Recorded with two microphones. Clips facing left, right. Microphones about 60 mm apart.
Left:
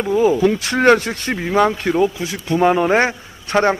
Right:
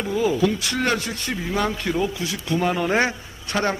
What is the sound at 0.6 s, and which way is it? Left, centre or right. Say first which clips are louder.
Speech: left 10 dB; left.